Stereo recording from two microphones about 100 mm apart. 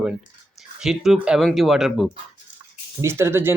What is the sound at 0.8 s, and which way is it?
Speech, 5° right (ahead or behind).